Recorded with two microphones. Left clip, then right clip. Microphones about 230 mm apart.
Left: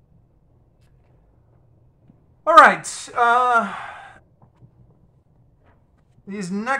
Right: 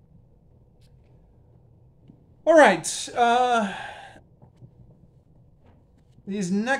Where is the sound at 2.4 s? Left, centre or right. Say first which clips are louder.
Left 5 dB; left.